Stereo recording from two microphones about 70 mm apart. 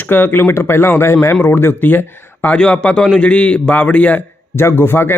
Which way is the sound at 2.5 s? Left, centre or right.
Centre.